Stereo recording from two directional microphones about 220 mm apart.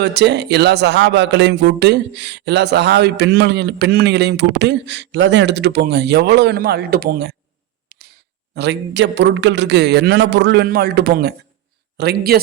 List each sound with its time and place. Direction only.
0.0 s speech: 50° right (ahead or behind)
7.9 s a sound: 45° right (ahead or behind)
8.5 s speech: 50° right (ahead or behind)